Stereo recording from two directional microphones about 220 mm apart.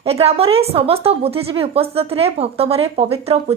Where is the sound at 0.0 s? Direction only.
25° right (ahead or behind).